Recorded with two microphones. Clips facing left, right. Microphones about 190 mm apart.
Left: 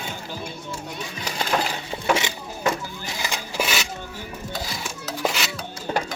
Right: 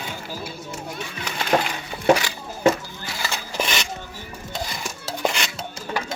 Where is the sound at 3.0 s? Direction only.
15° left (ahead or behind).